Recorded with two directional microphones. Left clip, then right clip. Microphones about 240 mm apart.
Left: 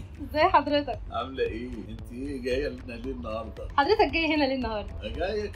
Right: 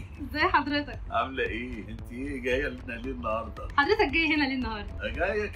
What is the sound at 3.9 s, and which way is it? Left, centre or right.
Speech, centre.